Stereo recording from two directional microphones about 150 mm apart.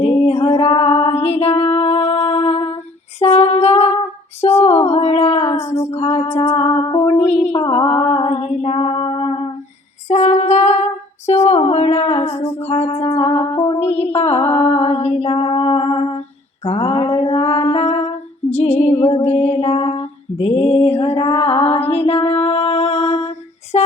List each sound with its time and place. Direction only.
0.0 s female singing: 45° left (ahead or behind)
0.6 s music: 40° left (ahead or behind)
3.2 s a sound: 45° left (ahead or behind)
4.6 s singing: 45° left (ahead or behind)
5.5 s a sound: 15° left (ahead or behind)
5.9 s music: 45° left (ahead or behind)
6.2 s music: 15° left (ahead or behind)
6.6 s music: 35° left (ahead or behind)
7.1 s a sound: 45° left (ahead or behind)
8.3 s female singing: 45° left (ahead or behind)
10.1 s female singing: 50° left (ahead or behind)
11.3 s music: 45° left (ahead or behind)
16.6 s a sound: 45° left (ahead or behind)
18.5 s female singing: 45° left (ahead or behind)